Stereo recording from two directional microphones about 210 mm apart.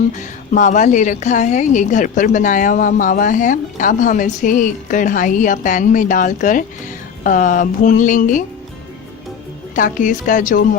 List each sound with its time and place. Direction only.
0.2 s a woman's voice: 35° left (ahead or behind)
9.7 s a woman's voice: 40° left (ahead or behind)